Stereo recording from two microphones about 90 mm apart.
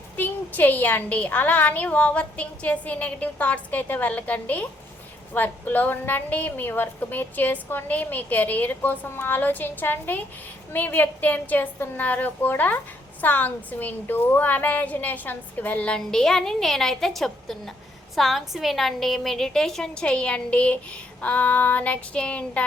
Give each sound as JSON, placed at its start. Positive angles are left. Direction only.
{"t": 0.2, "sound": "a woman's voice", "side_deg": 20}